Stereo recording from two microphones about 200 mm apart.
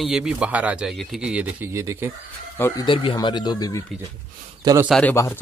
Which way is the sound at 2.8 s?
25° left (ahead or behind).